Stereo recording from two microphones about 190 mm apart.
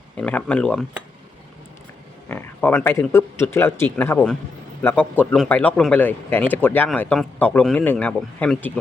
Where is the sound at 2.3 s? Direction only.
10° left (ahead or behind).